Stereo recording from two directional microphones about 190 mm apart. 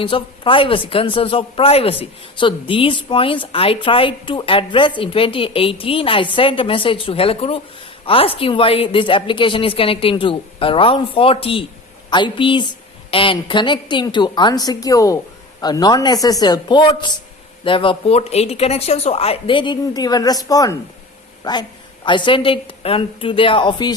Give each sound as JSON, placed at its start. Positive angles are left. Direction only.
{"t": 0.0, "sound": "a woman's voice", "side_deg": 30}